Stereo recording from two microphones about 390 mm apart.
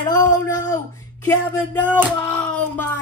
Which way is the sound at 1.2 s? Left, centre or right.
Centre.